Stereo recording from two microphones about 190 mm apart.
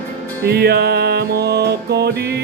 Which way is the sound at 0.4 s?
55° right (ahead or behind).